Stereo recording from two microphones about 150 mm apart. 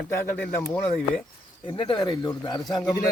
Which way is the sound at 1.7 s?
35° left (ahead or behind).